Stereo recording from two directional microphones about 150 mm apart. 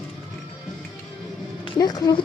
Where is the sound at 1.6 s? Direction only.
25° left (ahead or behind).